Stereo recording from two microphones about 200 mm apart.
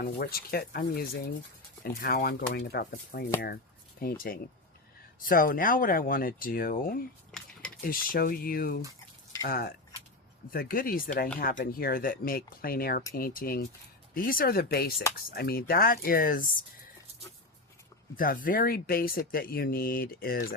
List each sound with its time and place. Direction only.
0.0 s speech: 50° left (ahead or behind)
7.3 s a sound: 5° left (ahead or behind)
7.9 s speech: 45° left (ahead or behind)
18.2 s speech: 45° left (ahead or behind)